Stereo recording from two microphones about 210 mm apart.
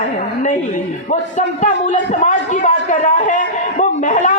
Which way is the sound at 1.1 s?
35° left (ahead or behind).